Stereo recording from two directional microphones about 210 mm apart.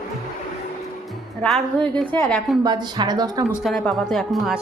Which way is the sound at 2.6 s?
20° right (ahead or behind).